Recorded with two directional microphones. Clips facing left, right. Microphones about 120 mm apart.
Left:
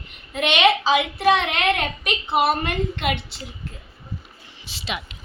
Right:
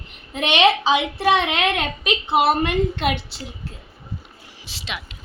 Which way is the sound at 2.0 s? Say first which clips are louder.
Right 4 dB; 25° right (ahead or behind).